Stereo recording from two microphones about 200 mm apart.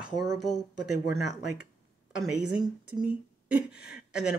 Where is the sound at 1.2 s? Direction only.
55° left (ahead or behind).